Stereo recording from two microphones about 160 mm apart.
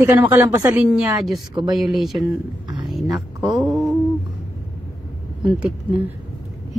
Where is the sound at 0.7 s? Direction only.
5° right (ahead or behind).